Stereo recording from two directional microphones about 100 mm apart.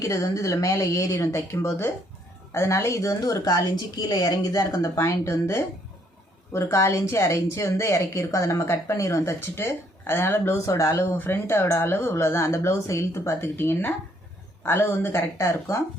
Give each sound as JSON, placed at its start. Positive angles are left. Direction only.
{"t": 0.0, "sound": "speech", "side_deg": 30}